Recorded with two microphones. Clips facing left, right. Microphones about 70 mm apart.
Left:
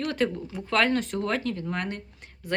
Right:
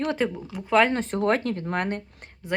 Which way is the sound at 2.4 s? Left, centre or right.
Right.